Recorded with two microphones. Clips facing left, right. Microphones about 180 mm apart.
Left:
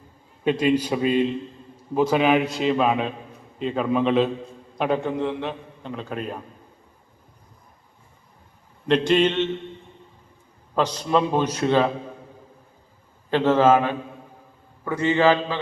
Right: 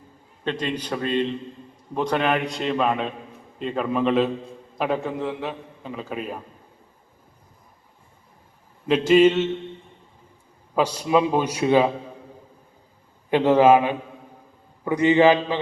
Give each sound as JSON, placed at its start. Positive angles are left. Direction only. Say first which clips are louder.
{"t": 0.4, "sound": "a man's voice", "louder": "left 7 dB", "side_deg": 10}
{"t": 8.9, "sound": "a man's voice", "louder": "right 3 dB", "side_deg": -5}
{"t": 10.8, "sound": "a man's voice", "louder": "right 1 dB", "side_deg": -10}
{"t": 13.3, "sound": "a man's voice", "louder": "right 2 dB", "side_deg": -15}